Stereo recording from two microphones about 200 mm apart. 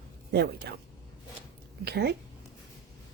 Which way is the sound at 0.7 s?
55° right (ahead or behind).